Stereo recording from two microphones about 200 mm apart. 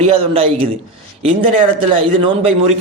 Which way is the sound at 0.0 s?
30° right (ahead or behind).